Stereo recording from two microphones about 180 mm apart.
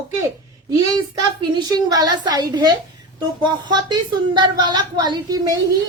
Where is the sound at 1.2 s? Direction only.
20° right (ahead or behind).